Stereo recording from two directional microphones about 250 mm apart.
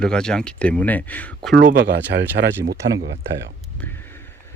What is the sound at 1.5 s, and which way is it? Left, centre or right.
Speech, right.